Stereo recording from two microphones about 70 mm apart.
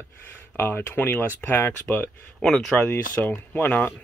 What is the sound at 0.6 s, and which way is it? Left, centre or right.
Speech, left.